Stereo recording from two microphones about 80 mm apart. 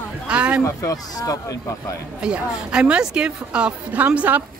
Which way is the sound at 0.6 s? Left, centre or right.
Left.